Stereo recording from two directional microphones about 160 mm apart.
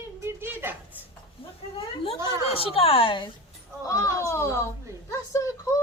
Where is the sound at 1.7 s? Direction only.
35° left (ahead or behind).